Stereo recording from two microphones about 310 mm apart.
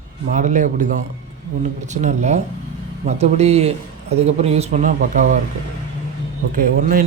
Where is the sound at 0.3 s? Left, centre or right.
Right.